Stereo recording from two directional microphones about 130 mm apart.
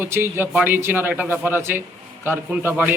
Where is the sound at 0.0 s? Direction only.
15° right (ahead or behind).